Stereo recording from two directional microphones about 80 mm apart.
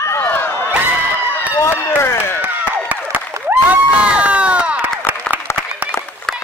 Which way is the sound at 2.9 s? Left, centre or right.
Right.